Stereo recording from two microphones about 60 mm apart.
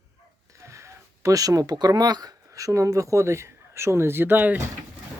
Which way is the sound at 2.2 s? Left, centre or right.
Right.